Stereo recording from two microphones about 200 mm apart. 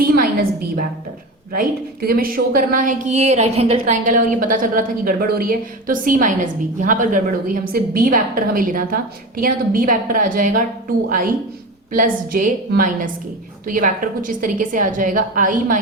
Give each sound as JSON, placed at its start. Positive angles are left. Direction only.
{"t": 0.0, "sound": "a sound", "side_deg": -50}
{"t": 1.5, "sound": "a woman's voice", "side_deg": -45}
{"t": 11.9, "sound": "a woman's voice", "side_deg": -45}